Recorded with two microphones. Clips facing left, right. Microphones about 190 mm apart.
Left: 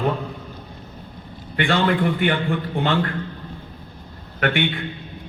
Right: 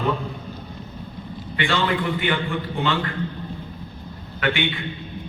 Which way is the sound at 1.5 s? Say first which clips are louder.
Left 3 dB; 55° left (ahead or behind).